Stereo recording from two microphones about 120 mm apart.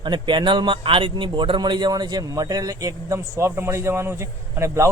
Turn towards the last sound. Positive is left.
turn(degrees=-25)  # may be behind; listen again after turning